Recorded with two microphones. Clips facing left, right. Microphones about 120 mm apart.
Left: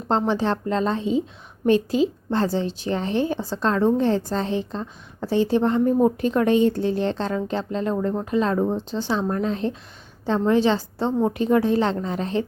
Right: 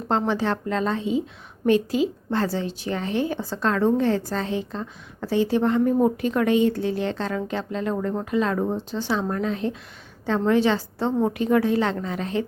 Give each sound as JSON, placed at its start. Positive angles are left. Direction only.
{"t": 0.3, "sound": "a woman's voice", "side_deg": 25}